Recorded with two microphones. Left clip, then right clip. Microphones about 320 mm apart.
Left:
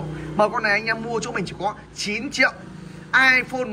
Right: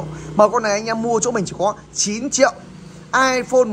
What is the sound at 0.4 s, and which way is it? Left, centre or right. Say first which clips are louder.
A woman's voice: right 5 dB; centre.